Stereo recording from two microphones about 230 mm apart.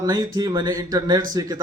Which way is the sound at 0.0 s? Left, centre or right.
Centre.